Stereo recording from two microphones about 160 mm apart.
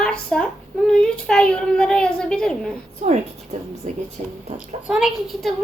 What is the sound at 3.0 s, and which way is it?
Speech, 45° right (ahead or behind).